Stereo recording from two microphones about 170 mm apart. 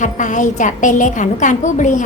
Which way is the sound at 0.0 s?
45° left (ahead or behind).